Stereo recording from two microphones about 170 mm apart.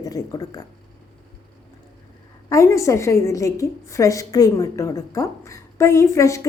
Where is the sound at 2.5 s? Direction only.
15° left (ahead or behind).